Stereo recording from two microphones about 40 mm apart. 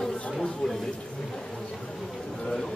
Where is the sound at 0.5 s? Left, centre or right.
Centre.